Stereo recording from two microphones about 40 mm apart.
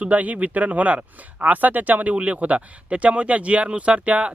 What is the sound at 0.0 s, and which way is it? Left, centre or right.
Speech, right.